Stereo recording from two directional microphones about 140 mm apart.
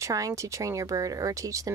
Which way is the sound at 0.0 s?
25° right (ahead or behind).